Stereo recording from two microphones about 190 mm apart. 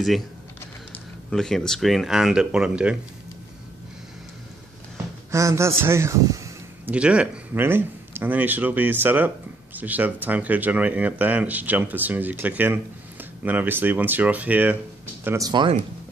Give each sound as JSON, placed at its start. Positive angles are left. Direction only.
{"t": 1.3, "sound": "speech", "side_deg": 0}
{"t": 5.3, "sound": "a man's voice", "side_deg": -15}
{"t": 7.0, "sound": "speech", "side_deg": -5}